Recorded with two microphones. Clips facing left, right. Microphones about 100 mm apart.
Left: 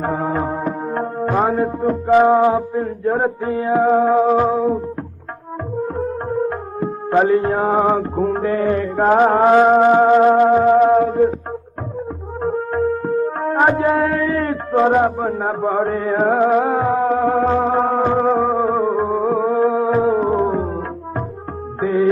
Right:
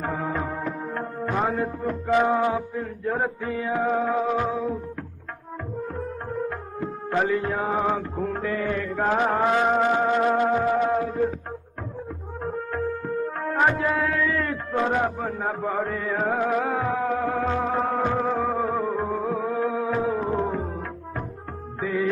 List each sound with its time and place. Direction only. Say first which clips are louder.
0.0 s music: left 7 dB; 40° left (ahead or behind)
6.8 s music: left 9 dB; 40° left (ahead or behind)
12.4 s music: left 9 dB; 40° left (ahead or behind)
21.7 s music: left 9 dB; 40° left (ahead or behind)